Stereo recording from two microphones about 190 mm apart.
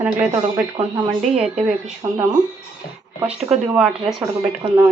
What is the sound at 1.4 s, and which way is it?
Speech, 5° right (ahead or behind).